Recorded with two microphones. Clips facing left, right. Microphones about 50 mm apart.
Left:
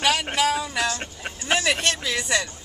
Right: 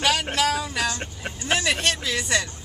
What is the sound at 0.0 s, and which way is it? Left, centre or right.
Music, centre.